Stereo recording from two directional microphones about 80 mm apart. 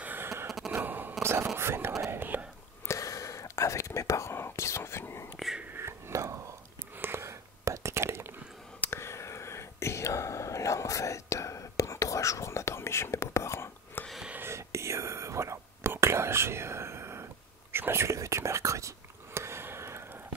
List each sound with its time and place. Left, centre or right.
0.0 s a sound: right
0.5 s a sound: centre
0.7 s a sound: right
1.2 s whispering: right
2.1 s whispering: right
2.9 s whispering: left
5.4 s whispering: centre
5.8 s whispering: right
8.9 s whispering: left
14.4 s whispering: right